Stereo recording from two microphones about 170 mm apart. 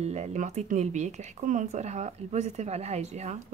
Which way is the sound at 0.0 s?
40° right (ahead or behind).